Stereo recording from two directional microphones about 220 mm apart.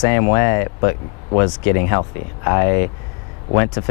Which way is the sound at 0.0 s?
15° left (ahead or behind).